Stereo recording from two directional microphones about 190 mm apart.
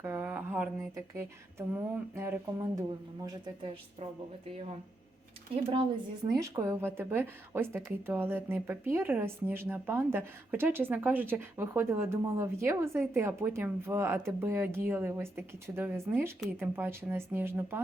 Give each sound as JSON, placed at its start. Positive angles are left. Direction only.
{"t": 0.0, "sound": "a woman's voice", "side_deg": -10}
{"t": 3.2, "sound": "speech", "side_deg": -25}
{"t": 6.3, "sound": "a woman's voice", "side_deg": -15}